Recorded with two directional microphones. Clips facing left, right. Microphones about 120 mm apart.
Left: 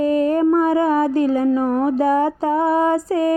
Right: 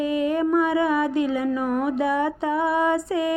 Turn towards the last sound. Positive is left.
turn(degrees=40)  # may be behind; listen again after turning